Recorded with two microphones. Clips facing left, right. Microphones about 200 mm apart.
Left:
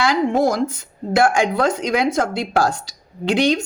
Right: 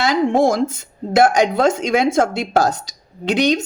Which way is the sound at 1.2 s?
20° right (ahead or behind).